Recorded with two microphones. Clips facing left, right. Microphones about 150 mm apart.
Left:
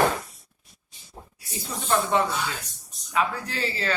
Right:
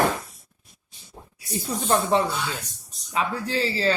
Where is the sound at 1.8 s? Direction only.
35° right (ahead or behind).